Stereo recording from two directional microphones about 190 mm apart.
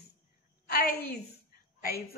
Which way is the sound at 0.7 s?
55° left (ahead or behind).